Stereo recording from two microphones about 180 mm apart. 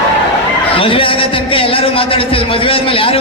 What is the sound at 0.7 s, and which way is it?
A man's voice, 30° left (ahead or behind).